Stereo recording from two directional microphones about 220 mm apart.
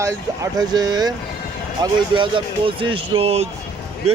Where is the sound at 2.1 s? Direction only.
20° right (ahead or behind).